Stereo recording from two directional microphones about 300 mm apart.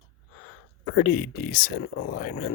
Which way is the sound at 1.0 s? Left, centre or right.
Left.